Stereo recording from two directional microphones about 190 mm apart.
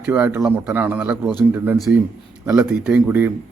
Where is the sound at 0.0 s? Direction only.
5° right (ahead or behind).